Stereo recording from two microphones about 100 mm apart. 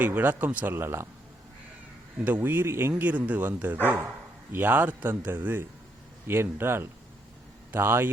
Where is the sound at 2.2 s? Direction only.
20° right (ahead or behind).